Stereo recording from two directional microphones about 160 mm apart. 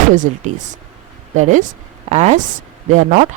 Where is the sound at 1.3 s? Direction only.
50° right (ahead or behind).